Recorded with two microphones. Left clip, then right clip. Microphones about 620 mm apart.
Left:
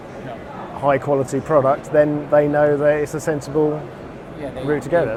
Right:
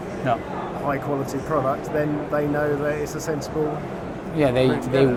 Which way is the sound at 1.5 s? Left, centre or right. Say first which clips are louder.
Left 8 dB; left.